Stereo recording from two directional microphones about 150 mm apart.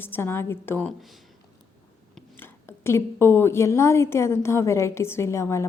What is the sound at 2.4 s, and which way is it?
A woman's voice, 15° left (ahead or behind).